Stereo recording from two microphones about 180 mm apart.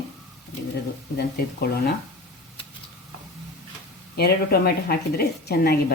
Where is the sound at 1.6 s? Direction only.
60° left (ahead or behind).